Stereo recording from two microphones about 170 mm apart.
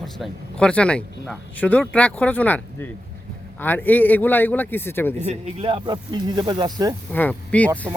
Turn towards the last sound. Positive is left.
turn(degrees=10)  # may be behind; listen again after turning